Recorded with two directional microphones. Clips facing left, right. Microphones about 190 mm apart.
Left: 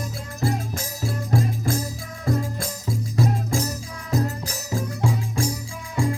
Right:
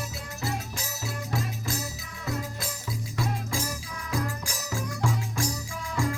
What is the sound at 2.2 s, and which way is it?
Music, 45° left (ahead or behind).